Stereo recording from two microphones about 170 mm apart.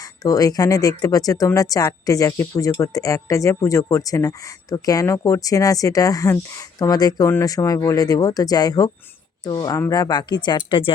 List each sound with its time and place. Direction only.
0.2 s speech: 20° left (ahead or behind)